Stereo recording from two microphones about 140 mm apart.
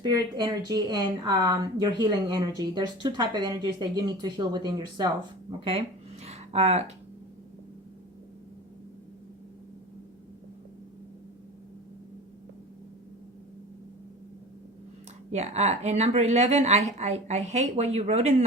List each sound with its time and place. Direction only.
0.0 s speech: 30° right (ahead or behind)
6.2 s a sound: 50° right (ahead or behind)
15.3 s a woman's voice: 50° right (ahead or behind)